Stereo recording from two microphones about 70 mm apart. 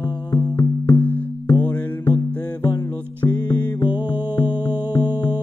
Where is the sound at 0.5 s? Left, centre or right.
Left.